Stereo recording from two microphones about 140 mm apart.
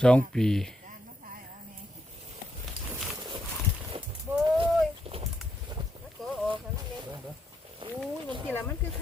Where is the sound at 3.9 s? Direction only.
45° right (ahead or behind).